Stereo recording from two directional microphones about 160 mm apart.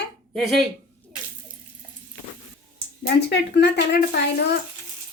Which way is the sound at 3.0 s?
85° left.